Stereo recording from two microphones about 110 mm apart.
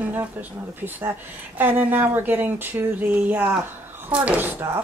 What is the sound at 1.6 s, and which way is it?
Speech, 15° right (ahead or behind).